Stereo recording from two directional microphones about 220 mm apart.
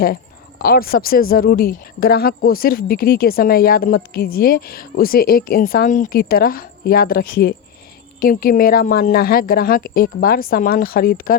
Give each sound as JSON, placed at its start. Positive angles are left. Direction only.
{"t": 0.6, "sound": "a woman's voice", "side_deg": 40}